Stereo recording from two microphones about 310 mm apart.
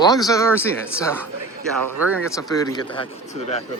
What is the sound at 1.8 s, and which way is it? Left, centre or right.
Speech, right.